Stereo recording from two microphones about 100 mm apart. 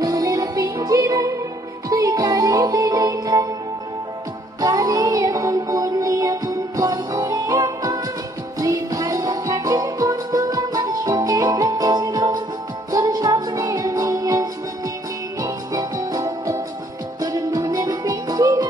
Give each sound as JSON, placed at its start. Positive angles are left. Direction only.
{"t": 0.0, "sound": "music", "side_deg": -35}
{"t": 4.6, "sound": "music", "side_deg": -35}